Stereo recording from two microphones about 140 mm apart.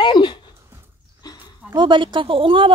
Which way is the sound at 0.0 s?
35° left (ahead or behind).